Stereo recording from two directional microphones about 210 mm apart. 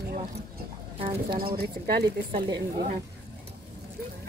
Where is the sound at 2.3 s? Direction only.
20° right (ahead or behind).